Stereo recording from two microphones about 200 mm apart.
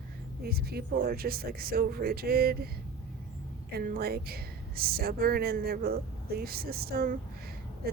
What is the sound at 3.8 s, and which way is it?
Speech, 50° right (ahead or behind).